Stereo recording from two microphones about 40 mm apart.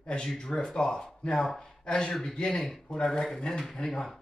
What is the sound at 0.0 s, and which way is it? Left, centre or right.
Speech, left.